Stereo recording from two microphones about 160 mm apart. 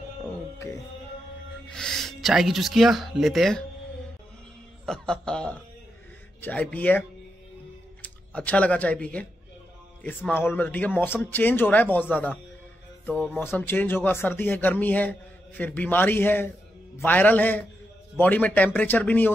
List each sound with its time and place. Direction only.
0.7 s music: 20° left (ahead or behind)
1.7 s speech: 5° left (ahead or behind)
4.8 s chuckle: 5° left (ahead or behind)
6.4 s speech: 10° left (ahead or behind)